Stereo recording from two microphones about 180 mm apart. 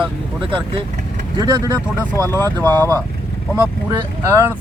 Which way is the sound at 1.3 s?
20° right (ahead or behind).